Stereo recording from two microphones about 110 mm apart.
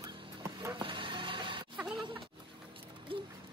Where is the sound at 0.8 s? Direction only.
50° right (ahead or behind).